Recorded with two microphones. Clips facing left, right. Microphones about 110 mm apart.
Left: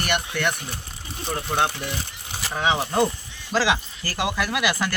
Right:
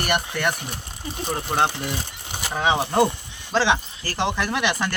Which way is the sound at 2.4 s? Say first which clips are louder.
Right 2 dB; 20° right (ahead or behind).